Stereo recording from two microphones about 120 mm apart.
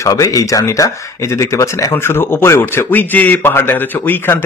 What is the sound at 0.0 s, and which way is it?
Speech, 30° left (ahead or behind).